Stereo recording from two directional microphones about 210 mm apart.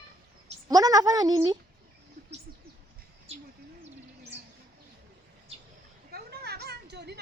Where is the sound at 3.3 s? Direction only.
30° right (ahead or behind).